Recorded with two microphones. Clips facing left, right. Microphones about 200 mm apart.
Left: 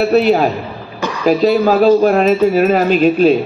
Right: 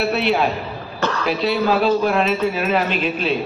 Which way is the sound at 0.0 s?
40° left (ahead or behind).